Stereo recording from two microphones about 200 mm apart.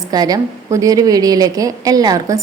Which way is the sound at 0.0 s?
20° right (ahead or behind).